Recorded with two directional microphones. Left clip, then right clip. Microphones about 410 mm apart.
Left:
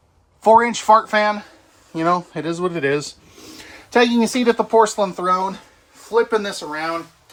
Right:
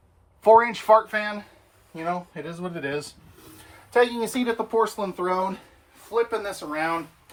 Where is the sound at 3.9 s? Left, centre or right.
Left.